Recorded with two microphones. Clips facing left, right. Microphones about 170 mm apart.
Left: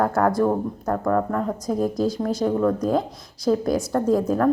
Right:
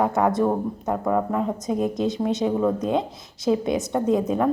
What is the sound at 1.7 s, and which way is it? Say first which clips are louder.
Speech: left 1 dB; 20° right (ahead or behind).